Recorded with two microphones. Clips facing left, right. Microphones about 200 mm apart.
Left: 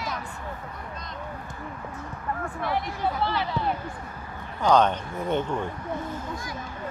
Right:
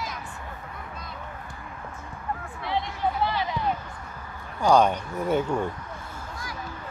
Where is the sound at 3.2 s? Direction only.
15° right (ahead or behind).